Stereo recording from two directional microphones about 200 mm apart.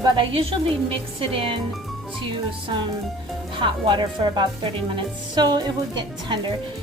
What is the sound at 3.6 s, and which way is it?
Speech, 25° right (ahead or behind).